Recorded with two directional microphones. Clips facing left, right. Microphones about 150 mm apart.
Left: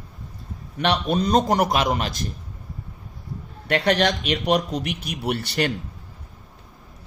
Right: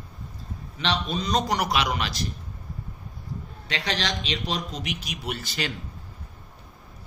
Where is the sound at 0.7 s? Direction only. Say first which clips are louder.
Left 6 dB; 60° left (ahead or behind).